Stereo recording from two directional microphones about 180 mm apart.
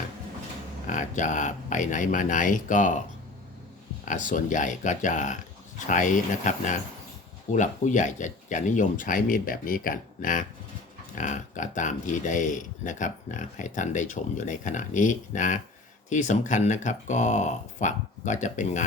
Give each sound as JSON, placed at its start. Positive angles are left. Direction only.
{"t": 0.9, "sound": "speech", "side_deg": 45}
{"t": 4.0, "sound": "speech", "side_deg": 45}